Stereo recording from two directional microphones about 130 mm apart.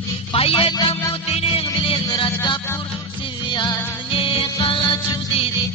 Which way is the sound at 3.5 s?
35° left (ahead or behind).